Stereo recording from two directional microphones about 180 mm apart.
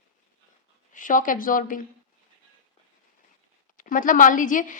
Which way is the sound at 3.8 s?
45° left (ahead or behind).